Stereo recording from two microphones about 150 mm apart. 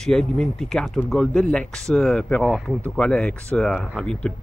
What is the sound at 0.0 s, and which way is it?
Speech, 5° left (ahead or behind).